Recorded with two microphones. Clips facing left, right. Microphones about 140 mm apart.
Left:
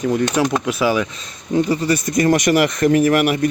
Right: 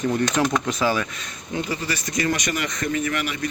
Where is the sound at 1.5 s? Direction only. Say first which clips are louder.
Left 10 dB; 30° left (ahead or behind).